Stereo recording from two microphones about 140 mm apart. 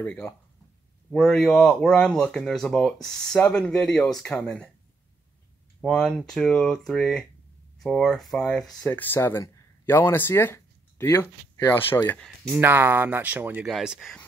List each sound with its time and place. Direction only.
0.0 s speech: 10° left (ahead or behind)
5.8 s speech: 5° left (ahead or behind)
8.8 s speech: 15° left (ahead or behind)
12.5 s speech: 15° right (ahead or behind)